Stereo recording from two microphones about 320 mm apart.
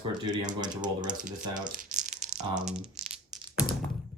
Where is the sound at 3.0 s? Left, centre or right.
Right.